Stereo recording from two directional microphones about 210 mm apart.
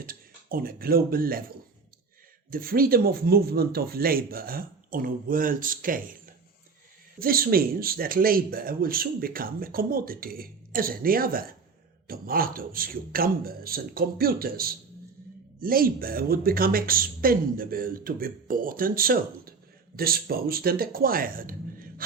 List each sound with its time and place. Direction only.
0.0 s speech: 45° right (ahead or behind)